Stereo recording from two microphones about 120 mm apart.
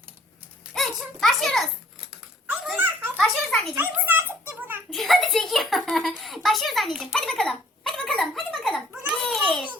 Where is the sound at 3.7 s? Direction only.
15° right (ahead or behind).